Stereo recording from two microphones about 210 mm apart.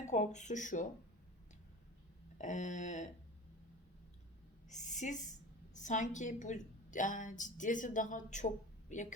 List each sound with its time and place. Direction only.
0.1 s a woman's voice: 35° left (ahead or behind)
2.4 s a woman's voice: 35° left (ahead or behind)
4.7 s a woman's voice: 35° left (ahead or behind)